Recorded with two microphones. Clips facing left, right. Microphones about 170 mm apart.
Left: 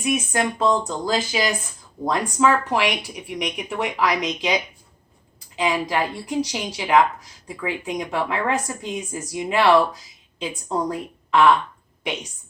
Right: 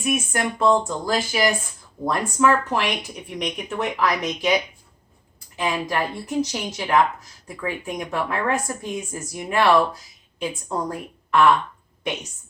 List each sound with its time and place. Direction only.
0.0 s a woman's voice: 20° left (ahead or behind)